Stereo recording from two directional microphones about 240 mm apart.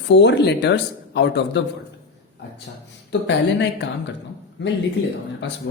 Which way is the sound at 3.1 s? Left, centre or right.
Left.